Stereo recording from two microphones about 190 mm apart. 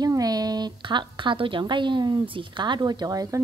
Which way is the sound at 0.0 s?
20° right (ahead or behind).